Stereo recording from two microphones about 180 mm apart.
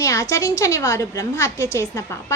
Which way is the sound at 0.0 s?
20° left (ahead or behind).